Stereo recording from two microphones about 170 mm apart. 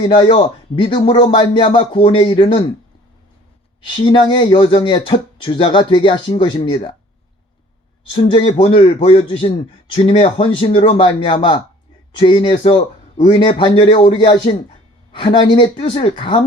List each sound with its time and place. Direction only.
0.1 s a man's voice: 30° left (ahead or behind)
3.8 s a man's voice: 30° left (ahead or behind)
8.1 s a man's voice: 30° left (ahead or behind)